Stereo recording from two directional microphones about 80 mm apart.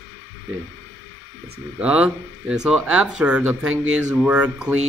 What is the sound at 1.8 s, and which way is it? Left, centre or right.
Speech, centre.